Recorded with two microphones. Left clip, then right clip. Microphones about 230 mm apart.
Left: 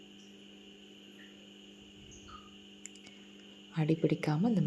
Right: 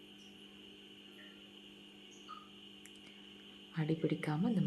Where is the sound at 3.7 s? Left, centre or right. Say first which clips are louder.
Left 6 dB; centre.